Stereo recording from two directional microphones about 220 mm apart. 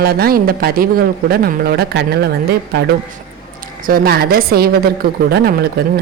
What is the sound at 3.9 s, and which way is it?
Speech, 40° right (ahead or behind).